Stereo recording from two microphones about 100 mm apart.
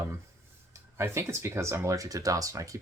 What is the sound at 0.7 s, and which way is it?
Speech, 30° right (ahead or behind).